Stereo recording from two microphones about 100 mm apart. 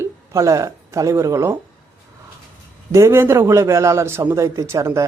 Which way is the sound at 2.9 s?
25° right (ahead or behind).